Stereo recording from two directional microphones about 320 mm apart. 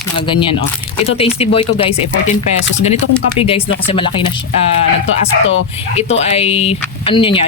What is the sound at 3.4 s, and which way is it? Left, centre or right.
Speech, centre.